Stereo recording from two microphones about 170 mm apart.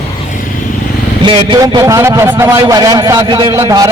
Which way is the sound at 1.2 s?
30° right (ahead or behind).